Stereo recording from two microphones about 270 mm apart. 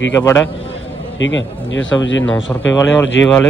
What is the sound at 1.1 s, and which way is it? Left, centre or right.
Speech, left.